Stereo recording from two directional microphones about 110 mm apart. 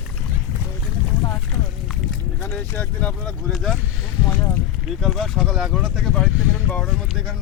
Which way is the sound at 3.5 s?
Centre (ahead or behind).